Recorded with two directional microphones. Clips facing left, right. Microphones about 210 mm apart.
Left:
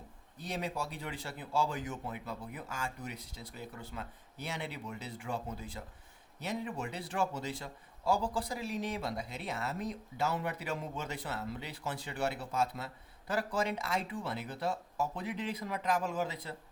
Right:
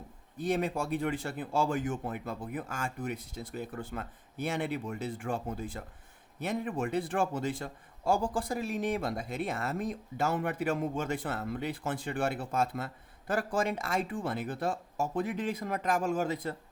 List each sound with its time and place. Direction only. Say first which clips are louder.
0.3 s a man's voice: right 7 dB; 50° right (ahead or behind)